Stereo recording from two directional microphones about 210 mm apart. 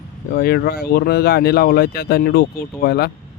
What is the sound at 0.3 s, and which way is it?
Speech, 50° left (ahead or behind).